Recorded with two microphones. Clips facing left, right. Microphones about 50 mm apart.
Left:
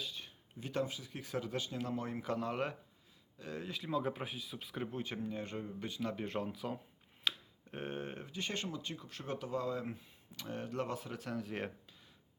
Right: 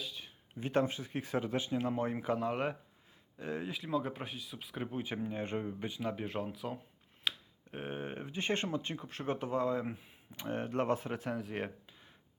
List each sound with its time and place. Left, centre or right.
0.0 s a sound: centre
0.6 s speech: right; by 2.7 s centre
3.3 s speech: right
3.8 s speech: centre
5.2 s speech: right
5.8 s speech: centre
7.3 s finger snapping: centre
8.3 s speech: right
9.8 s speech: centre
10.3 s speech: right
11.3 s speech: centre